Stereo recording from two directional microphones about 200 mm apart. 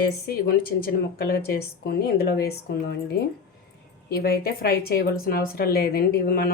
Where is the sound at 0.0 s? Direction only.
50° left (ahead or behind).